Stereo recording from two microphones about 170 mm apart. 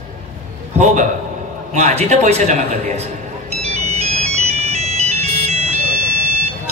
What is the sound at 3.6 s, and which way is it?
Music, 40° right (ahead or behind).